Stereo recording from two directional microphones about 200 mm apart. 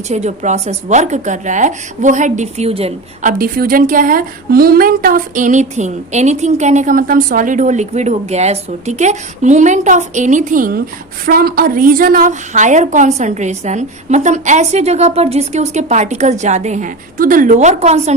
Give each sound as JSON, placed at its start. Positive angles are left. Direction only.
{"t": 0.1, "sound": "speech", "side_deg": -35}